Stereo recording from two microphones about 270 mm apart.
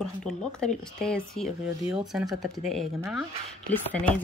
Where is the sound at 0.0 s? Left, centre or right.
Centre.